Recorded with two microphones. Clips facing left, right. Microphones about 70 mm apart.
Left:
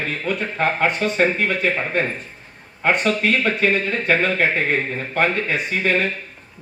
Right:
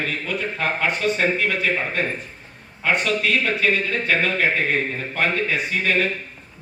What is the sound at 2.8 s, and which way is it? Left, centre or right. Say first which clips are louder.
A man's voice: left 2 dB; left.